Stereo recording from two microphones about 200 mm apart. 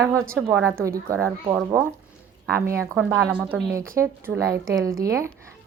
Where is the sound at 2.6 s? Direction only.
15° right (ahead or behind).